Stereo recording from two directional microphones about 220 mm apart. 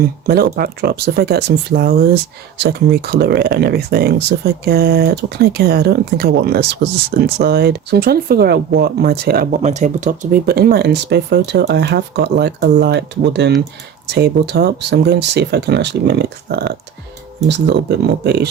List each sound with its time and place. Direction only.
0.0 s speech: 45° right (ahead or behind)
9.6 s speech: 30° right (ahead or behind); by 18.4 s 50° right (ahead or behind)